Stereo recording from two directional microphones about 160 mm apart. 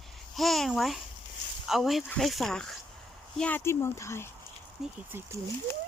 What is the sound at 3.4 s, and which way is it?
Speech, 15° left (ahead or behind).